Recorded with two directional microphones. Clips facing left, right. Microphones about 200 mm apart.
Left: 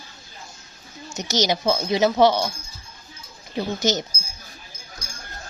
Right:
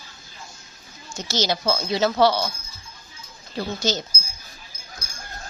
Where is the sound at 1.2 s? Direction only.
20° left (ahead or behind).